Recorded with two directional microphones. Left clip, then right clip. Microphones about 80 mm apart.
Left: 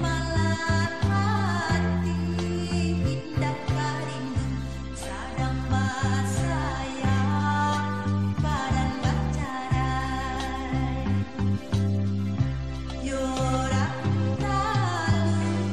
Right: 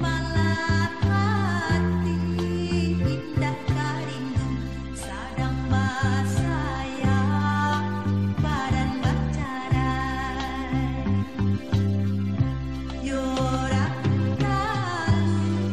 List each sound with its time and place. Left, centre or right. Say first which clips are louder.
0.0 s music: right 1 dB; right
3.3 s music: left 1 dB; right
5.4 s music: right 2 dB; right
13.1 s music: right 1 dB; right